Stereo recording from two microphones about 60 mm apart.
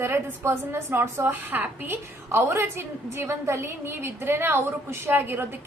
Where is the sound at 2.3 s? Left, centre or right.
Right.